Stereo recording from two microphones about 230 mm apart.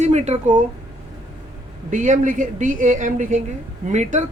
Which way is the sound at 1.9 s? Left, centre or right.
Right.